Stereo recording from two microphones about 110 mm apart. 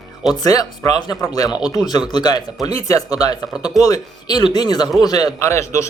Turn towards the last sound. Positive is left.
turn(degrees=25)  # may be behind; listen again after turning